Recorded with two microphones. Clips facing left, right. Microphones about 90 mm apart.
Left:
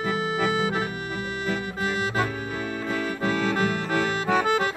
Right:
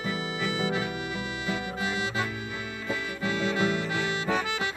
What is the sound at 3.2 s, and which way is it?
Music, 45° left (ahead or behind).